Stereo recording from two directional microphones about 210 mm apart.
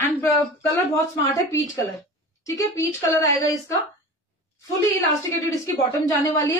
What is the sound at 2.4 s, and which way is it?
Speech, 15° left (ahead or behind).